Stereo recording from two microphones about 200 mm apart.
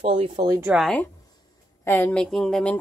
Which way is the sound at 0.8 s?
5° left (ahead or behind).